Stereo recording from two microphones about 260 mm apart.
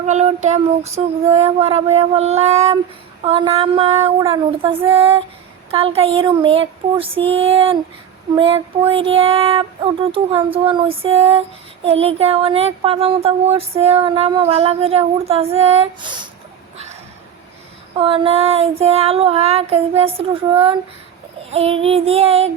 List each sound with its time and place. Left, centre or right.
0.1 s speech: right
17.9 s speech: right